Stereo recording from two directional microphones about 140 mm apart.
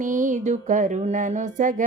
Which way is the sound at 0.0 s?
65° right (ahead or behind).